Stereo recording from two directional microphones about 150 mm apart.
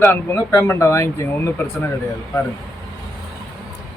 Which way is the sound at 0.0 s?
15° left (ahead or behind).